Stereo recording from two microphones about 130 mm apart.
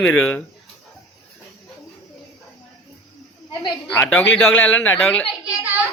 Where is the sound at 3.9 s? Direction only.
10° left (ahead or behind).